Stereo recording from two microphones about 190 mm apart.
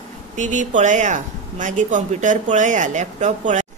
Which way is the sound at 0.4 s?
40° right (ahead or behind).